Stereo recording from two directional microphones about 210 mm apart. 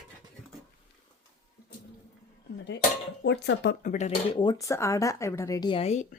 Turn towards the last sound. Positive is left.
turn(degrees=35)  # may be behind; listen again after turning